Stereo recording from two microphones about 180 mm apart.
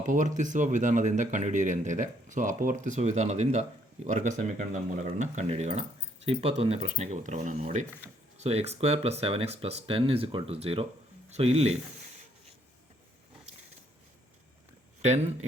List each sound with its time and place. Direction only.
0.0 s speech: 45° right (ahead or behind)